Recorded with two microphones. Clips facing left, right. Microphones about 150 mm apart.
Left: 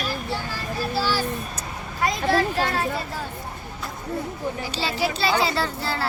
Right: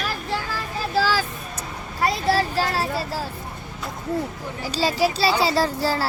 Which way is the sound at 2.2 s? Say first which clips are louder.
Left 1 dB; 35° right (ahead or behind).